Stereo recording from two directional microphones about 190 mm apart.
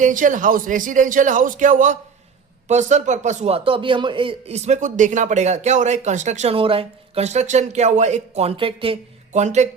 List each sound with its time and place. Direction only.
0.0 s a man's voice: 45° right (ahead or behind)